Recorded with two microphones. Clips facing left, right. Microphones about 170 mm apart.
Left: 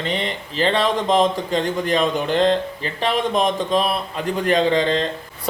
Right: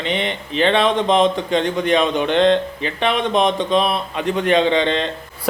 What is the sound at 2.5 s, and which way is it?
Speech, 40° left (ahead or behind).